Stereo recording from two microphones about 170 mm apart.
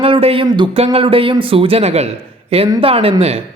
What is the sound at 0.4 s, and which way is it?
A man's voice, 25° right (ahead or behind).